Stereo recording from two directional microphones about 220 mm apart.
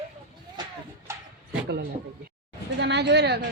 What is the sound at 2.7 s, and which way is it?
Speech, 50° right (ahead or behind).